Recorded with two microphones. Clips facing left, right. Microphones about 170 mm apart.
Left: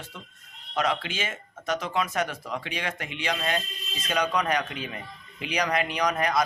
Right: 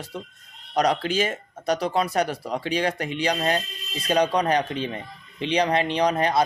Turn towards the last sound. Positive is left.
turn(degrees=-30)  # may be behind; listen again after turning